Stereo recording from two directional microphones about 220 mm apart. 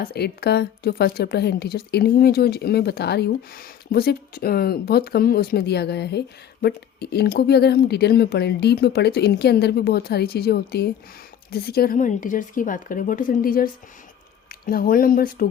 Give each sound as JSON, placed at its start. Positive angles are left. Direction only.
{"t": 0.0, "sound": "a woman's voice", "side_deg": 45}
{"t": 14.7, "sound": "a woman's voice", "side_deg": 40}